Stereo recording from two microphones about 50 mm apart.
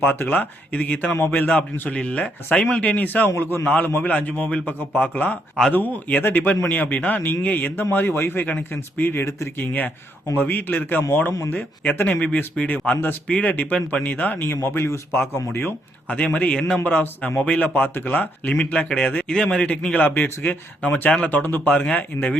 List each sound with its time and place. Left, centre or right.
0.0 s a man's voice: left
3.0 s speech: left
3.3 s speech: left
3.7 s a man's voice: left
7.9 s speech: left
9.2 s speech: left
10.3 s speech: left
12.2 s speech: left
16.0 s a man's voice: left
18.5 s a man's voice: left
20.0 s speech: left
21.7 s a man's voice: left